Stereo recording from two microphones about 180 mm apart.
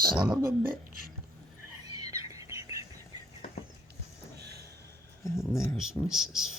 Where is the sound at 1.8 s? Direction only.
20° right (ahead or behind).